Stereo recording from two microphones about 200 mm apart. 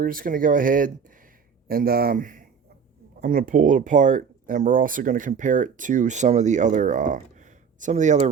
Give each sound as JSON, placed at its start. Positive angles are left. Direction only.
{"t": 0.0, "sound": "speech", "side_deg": -45}